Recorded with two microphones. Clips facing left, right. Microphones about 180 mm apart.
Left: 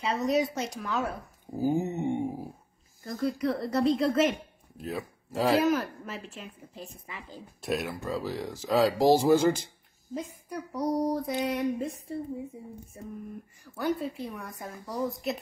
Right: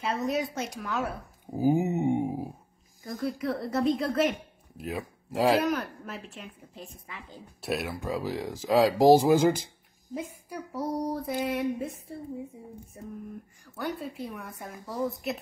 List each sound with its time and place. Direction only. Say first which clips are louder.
0.0 s a woman's voice: left 2 dB; centre (ahead or behind)
1.5 s a sound: right 3 dB; 15° right (ahead or behind)
3.0 s a woman's voice: left 2 dB; 10° right (ahead or behind)
4.8 s speech: even; 10° right (ahead or behind)
5.5 s a woman's voice: left 3 dB; centre (ahead or behind)
8.0 s a woman's voice: right 1 dB; 15° right (ahead or behind)
13.7 s a woman's voice: left 4 dB; centre (ahead or behind)